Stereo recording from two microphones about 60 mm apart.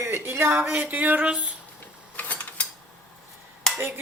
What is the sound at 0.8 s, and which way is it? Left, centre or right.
Speech, right.